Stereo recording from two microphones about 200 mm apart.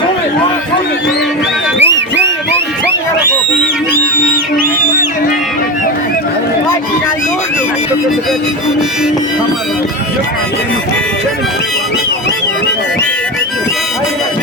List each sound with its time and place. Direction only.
1.8 s music: 60° right (ahead or behind)